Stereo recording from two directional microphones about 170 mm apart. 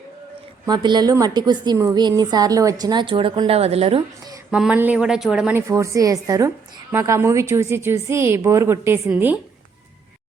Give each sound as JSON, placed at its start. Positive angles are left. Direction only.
{"t": 0.6, "sound": "a woman's voice", "side_deg": -25}
{"t": 4.5, "sound": "speech", "side_deg": -10}
{"t": 5.5, "sound": "a woman's voice", "side_deg": -15}